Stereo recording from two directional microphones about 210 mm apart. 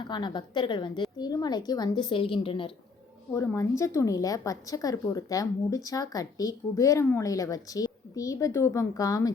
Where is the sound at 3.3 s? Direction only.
15° left (ahead or behind).